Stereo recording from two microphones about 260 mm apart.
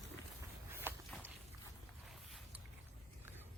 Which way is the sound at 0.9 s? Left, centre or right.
Centre.